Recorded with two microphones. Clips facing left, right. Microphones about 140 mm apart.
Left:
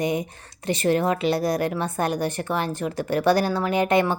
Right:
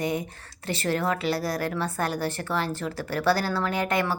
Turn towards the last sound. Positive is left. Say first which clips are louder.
# left 5 dB
turn(degrees=20)  # may be behind; listen again after turning